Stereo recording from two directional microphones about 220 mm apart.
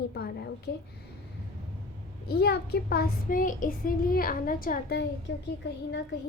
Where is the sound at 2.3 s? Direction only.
45° left (ahead or behind).